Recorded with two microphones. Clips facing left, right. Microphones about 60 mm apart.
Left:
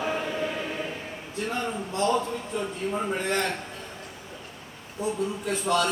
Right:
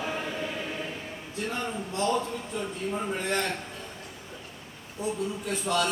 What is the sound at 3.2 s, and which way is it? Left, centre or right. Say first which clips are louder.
Speech: left 1 dB; left.